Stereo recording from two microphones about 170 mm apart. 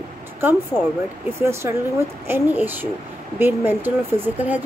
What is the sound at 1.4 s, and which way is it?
A woman's voice, 15° right (ahead or behind).